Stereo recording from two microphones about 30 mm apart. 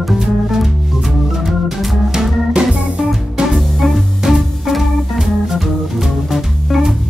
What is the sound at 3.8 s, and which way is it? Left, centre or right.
Music, centre.